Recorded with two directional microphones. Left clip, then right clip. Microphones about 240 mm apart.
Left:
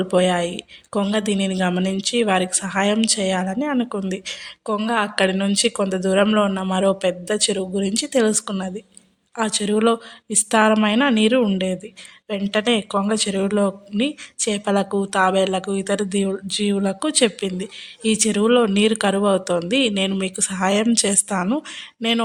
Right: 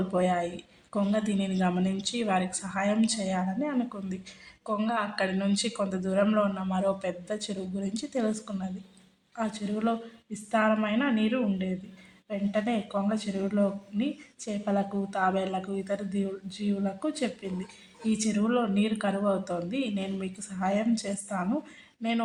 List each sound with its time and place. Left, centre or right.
0.1 s a woman's voice: left